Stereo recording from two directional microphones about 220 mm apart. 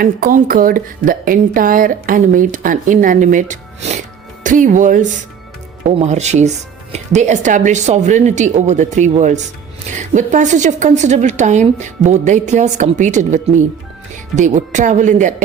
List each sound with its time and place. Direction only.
0.0 s speech: 40° right (ahead or behind)